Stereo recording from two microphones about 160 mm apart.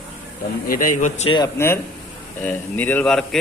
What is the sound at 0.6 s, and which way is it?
Speech, 60° left (ahead or behind).